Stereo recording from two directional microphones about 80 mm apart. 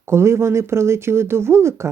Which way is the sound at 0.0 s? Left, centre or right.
Right.